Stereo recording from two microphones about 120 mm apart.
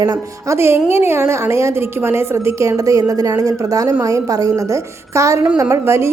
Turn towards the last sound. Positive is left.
turn(degrees=-25)  # may be behind; listen again after turning